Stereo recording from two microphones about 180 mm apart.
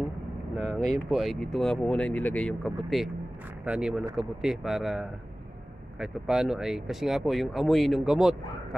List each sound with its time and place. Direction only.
0.6 s speech: 5° left (ahead or behind)